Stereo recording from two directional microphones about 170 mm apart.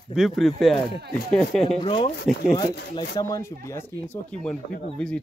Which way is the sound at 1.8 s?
30° left (ahead or behind).